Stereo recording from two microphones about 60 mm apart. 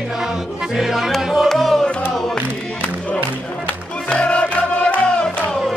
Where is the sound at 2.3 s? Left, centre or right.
Left.